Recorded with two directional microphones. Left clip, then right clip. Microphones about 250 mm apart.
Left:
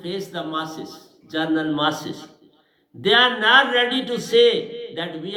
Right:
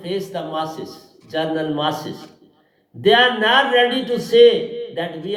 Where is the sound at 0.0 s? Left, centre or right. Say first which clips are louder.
Right 3 dB; left.